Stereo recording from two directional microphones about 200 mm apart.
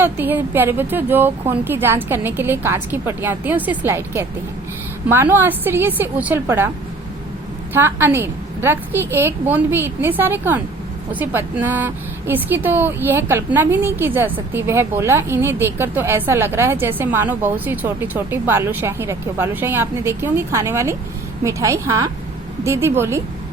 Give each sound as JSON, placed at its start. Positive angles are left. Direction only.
{"t": 0.0, "sound": "a woman's voice", "side_deg": -10}
{"t": 7.7, "sound": "a woman's voice", "side_deg": -10}